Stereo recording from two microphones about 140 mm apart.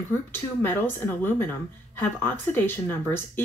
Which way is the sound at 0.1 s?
15° left (ahead or behind).